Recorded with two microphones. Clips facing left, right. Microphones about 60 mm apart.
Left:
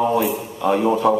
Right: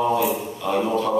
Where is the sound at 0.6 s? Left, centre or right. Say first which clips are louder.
Left 6 dB; centre.